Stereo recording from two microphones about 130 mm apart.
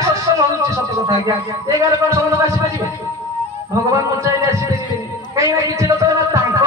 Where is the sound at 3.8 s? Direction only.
25° right (ahead or behind).